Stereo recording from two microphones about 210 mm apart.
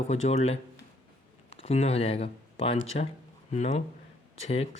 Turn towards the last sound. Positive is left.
turn(degrees=30)  # may be behind; listen again after turning